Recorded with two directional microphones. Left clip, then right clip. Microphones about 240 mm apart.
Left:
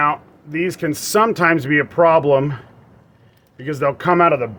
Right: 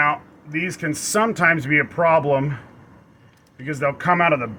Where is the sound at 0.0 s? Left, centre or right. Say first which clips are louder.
Left 2 dB; left.